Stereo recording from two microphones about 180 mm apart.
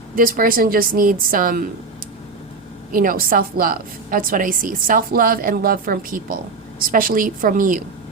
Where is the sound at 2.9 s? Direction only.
50° right (ahead or behind).